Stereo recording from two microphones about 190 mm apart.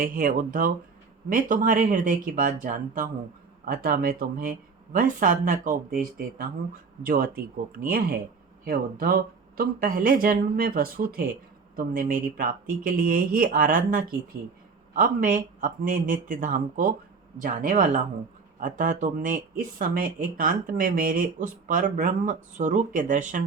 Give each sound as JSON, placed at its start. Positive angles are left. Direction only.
{"t": 0.0, "sound": "speech", "side_deg": -45}